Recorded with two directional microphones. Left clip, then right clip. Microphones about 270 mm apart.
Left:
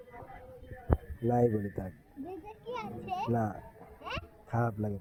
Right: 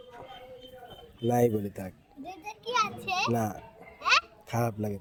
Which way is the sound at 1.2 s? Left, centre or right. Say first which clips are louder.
Right 4 dB; right.